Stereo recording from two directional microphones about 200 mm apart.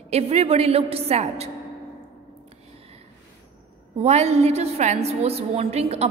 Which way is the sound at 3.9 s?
30° right (ahead or behind).